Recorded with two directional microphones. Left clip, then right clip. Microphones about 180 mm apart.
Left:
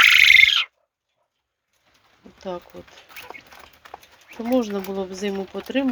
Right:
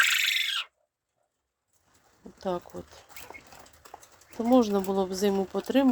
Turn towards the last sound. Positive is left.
turn(degrees=-15)  # may be behind; listen again after turning